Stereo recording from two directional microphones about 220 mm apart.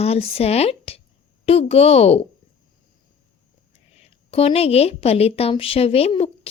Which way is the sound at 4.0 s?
25° left (ahead or behind).